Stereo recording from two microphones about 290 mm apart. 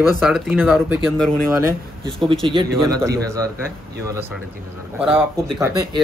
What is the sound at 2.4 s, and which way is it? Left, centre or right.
Speech, centre.